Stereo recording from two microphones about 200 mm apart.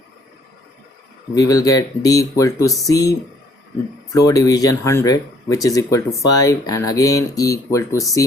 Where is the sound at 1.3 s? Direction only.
15° left (ahead or behind).